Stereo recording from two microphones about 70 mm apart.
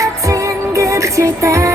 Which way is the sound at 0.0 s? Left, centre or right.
Right.